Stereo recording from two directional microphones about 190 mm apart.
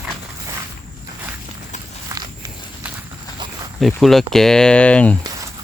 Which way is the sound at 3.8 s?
Centre (ahead or behind).